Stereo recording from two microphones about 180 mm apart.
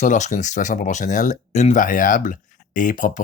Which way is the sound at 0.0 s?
45° left (ahead or behind).